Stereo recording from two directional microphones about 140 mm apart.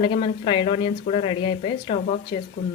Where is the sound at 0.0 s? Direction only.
40° left (ahead or behind).